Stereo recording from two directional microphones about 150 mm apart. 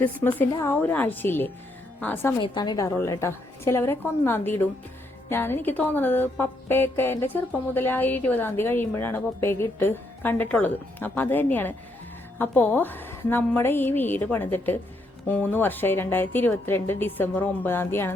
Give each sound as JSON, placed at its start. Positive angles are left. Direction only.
{"t": 0.0, "sound": "a woman's voice", "side_deg": 10}
{"t": 2.4, "sound": "a woman's voice", "side_deg": 30}